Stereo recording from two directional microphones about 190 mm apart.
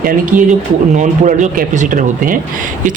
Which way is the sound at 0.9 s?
40° right (ahead or behind).